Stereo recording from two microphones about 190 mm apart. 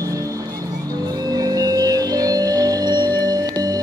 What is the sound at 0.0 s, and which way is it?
Music, 15° right (ahead or behind).